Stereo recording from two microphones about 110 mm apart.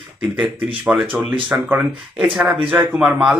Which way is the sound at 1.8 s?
10° right (ahead or behind).